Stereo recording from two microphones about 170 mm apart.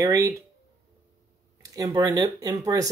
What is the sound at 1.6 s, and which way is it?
Speech, 20° right (ahead or behind).